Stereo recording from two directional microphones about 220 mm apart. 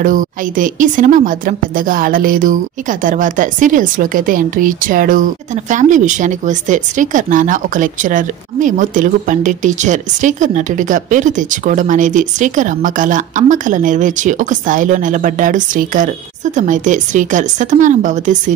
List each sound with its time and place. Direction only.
0.0 s speech: 35° right (ahead or behind)